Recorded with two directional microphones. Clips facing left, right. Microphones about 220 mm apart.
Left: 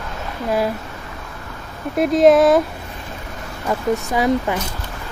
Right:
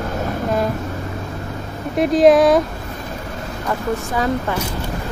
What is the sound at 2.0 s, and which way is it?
Speech, centre (ahead or behind).